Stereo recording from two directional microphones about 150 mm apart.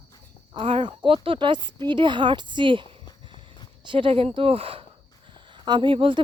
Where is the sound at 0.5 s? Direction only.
35° right (ahead or behind).